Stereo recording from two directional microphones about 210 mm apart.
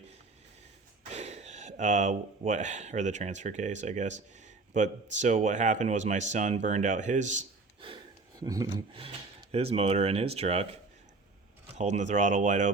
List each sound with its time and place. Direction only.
1.1 s speech: 30° right (ahead or behind)
11.8 s speech: 35° right (ahead or behind)